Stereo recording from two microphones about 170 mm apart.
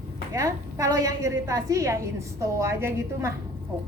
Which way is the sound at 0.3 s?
20° right (ahead or behind).